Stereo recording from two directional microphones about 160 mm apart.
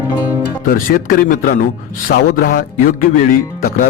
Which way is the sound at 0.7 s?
60° left (ahead or behind).